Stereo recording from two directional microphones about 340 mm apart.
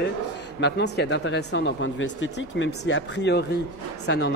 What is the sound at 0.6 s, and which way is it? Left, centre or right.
Speech, left.